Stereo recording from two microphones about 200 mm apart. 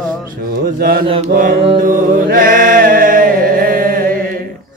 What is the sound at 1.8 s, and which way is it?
Chant, 45° right (ahead or behind).